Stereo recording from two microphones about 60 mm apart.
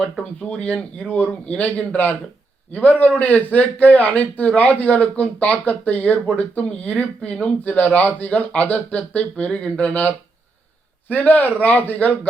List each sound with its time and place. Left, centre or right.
0.0 s speech: centre
11.1 s speech: left